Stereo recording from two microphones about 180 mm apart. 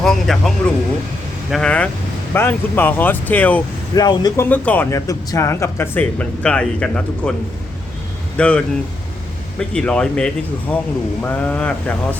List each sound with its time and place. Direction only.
0.0 s speech: centre (ahead or behind)
3.9 s a man's voice: 20° left (ahead or behind)
4.4 s speech: 10° left (ahead or behind)
8.4 s speech: 5° left (ahead or behind)